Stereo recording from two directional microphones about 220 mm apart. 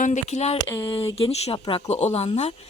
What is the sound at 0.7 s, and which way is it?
Speech, 20° left (ahead or behind).